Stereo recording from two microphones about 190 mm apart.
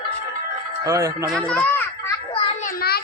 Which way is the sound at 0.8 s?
15° right (ahead or behind).